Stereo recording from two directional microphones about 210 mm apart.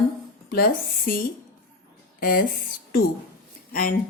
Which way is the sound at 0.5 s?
45° left (ahead or behind).